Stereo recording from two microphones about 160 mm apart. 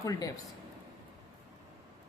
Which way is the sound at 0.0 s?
20° left (ahead or behind).